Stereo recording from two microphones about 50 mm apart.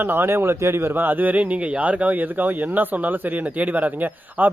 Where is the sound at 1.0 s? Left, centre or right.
Right.